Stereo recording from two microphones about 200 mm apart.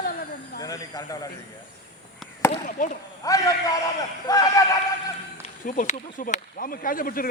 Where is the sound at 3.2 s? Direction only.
15° left (ahead or behind).